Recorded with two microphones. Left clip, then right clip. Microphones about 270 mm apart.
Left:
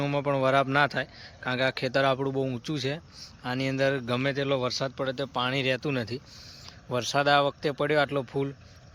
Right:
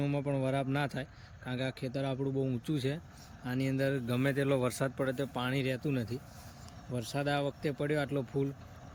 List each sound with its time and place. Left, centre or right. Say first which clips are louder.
0.0 s speech: left 8 dB; centre